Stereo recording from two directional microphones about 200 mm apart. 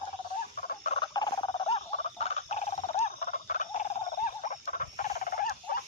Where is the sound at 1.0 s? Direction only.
20° left (ahead or behind).